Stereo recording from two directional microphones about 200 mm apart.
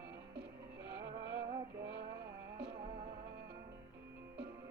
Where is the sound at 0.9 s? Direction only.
55° right (ahead or behind).